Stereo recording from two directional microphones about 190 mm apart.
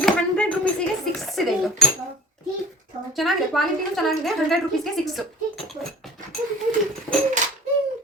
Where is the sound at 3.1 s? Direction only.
Centre (ahead or behind).